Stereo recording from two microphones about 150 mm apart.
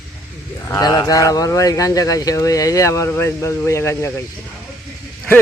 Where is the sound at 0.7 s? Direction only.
25° left (ahead or behind).